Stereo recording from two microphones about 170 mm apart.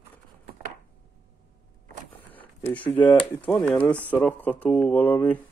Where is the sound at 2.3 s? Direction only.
10° left (ahead or behind).